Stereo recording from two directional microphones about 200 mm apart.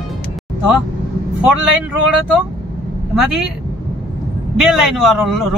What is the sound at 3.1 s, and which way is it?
Speech, centre (ahead or behind).